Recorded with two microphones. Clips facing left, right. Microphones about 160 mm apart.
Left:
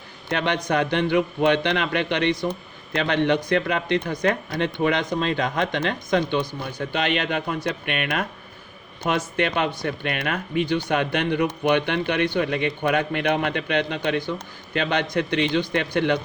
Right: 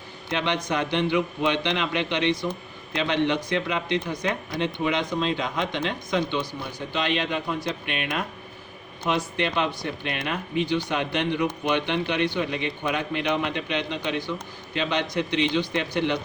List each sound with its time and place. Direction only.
0.3 s a man's voice: 55° left (ahead or behind)